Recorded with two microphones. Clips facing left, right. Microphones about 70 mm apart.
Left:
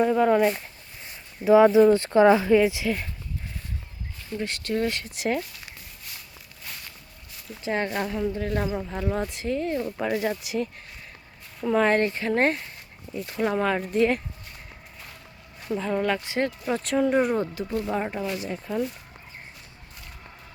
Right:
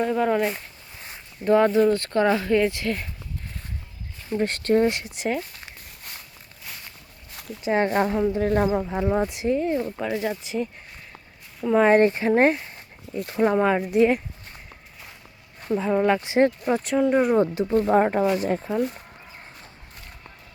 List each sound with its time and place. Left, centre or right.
0.0 s speech: centre
1.9 s speech: centre
4.4 s speech: right
5.0 s speech: centre
7.8 s speech: right
10.0 s speech: centre
11.6 s speech: centre
15.7 s speech: centre
16.8 s speech: centre
17.3 s speech: right
17.7 s speech: right